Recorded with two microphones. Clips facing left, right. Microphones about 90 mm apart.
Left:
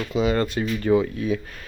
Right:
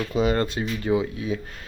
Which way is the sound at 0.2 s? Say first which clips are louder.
Left 1 dB; 40° right (ahead or behind).